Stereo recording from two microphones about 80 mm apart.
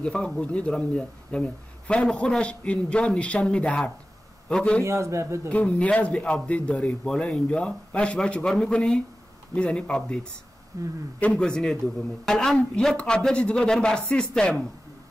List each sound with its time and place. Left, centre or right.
0.0 s speech: centre
4.8 s a man's voice: right
5.5 s speech: centre
10.7 s speech: right
11.1 s speech: centre